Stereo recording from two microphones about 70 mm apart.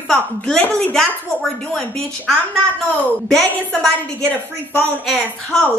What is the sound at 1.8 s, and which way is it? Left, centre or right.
Speech, centre.